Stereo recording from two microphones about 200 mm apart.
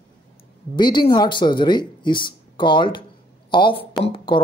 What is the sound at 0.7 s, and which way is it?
A woman's voice, 20° left (ahead or behind).